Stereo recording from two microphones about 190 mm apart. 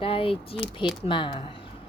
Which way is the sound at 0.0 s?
30° left (ahead or behind).